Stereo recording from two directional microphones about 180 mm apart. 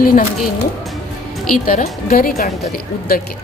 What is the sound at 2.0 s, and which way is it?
Speech, 55° left (ahead or behind).